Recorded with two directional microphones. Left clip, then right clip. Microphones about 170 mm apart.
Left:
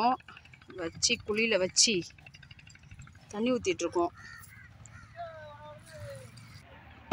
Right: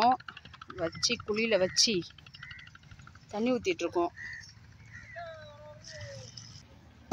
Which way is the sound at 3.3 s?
Centre (ahead or behind).